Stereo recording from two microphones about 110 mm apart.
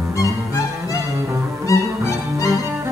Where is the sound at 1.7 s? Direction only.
30° left (ahead or behind).